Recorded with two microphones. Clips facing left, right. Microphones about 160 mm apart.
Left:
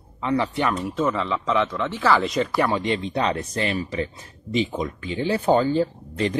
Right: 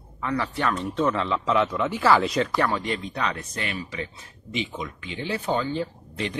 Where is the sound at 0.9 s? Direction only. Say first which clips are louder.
Left 1 dB; centre (ahead or behind).